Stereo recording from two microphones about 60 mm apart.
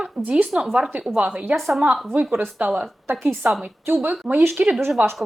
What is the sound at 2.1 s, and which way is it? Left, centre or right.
Speech, right.